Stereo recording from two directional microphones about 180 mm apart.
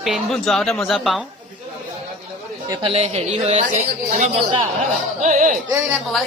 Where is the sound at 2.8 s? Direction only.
35° right (ahead or behind).